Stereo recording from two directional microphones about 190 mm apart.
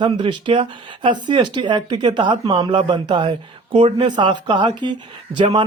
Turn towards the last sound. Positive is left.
turn(degrees=-25)  # may be behind; listen again after turning